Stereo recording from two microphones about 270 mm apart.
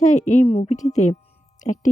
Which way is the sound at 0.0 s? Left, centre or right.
Left.